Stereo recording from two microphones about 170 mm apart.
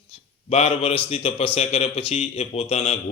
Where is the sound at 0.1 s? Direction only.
35° left (ahead or behind).